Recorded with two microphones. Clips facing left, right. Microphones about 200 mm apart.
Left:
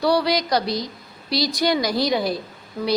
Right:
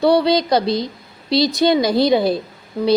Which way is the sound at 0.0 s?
25° right (ahead or behind).